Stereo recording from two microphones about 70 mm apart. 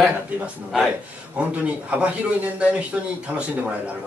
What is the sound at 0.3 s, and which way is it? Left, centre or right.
Speech, right.